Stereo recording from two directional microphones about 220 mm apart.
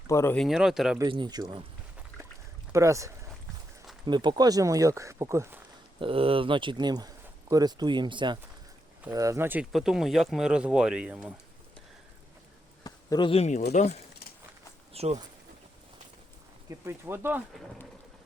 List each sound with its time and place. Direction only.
0.1 s speech: 10° left (ahead or behind)
0.4 s speech: centre (ahead or behind)
0.9 s speech: 20° right (ahead or behind)
2.7 s speech: 15° right (ahead or behind)
6.0 s speech: 25° right (ahead or behind); by 11.3 s 5° right (ahead or behind)
12.8 s a sound: 20° left (ahead or behind)
13.7 s speech: 30° left (ahead or behind)
14.9 s speech: 30° right (ahead or behind)
16.6 s speech: 10° right (ahead or behind)
17.5 s speech: centre (ahead or behind)